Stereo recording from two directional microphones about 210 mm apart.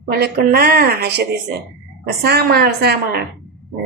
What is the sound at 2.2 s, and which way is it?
Speech, 50° right (ahead or behind).